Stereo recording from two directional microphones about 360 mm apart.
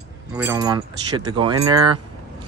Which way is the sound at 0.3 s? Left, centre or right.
Centre.